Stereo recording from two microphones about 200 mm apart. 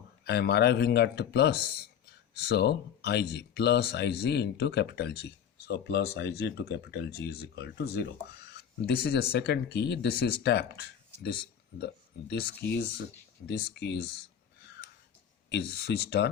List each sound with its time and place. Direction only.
0.3 s speech: 55° left (ahead or behind)
15.4 s speech: 55° left (ahead or behind)